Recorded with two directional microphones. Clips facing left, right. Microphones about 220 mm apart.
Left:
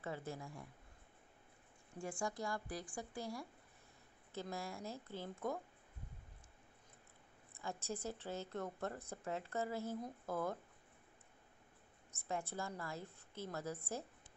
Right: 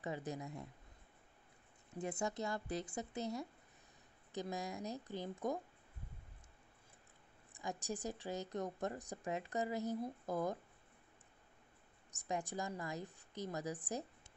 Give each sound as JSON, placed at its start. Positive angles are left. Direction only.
{"t": 0.0, "sound": "a woman's voice", "side_deg": -15}
{"t": 2.0, "sound": "a woman's voice", "side_deg": -20}
{"t": 7.5, "sound": "a woman's voice", "side_deg": -15}
{"t": 12.1, "sound": "a woman's voice", "side_deg": -15}